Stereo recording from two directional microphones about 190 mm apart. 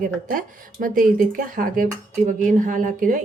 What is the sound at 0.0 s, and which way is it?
Speech, 45° right (ahead or behind).